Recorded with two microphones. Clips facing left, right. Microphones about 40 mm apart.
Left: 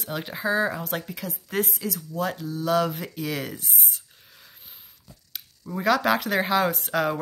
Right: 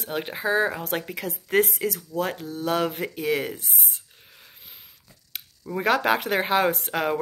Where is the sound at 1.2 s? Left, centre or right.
Right.